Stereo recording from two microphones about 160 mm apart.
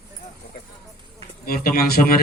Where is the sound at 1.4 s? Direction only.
65° left (ahead or behind).